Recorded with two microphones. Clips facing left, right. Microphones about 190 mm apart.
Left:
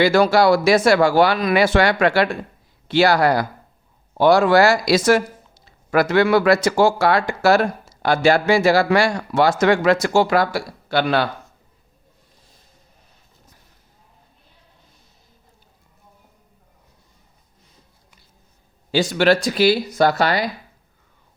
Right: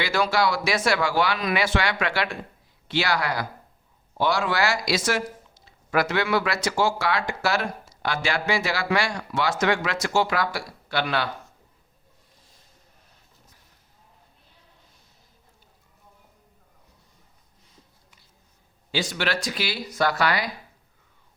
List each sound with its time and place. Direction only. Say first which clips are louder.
0.0 s speech: left 9 dB; 40° left (ahead or behind)
18.9 s speech: left 11 dB; 35° left (ahead or behind)